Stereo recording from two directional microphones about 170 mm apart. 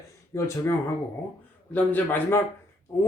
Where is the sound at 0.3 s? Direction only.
15° left (ahead or behind).